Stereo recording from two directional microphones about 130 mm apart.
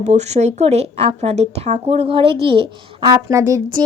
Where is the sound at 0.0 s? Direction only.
60° right (ahead or behind); by 2.6 s 45° right (ahead or behind).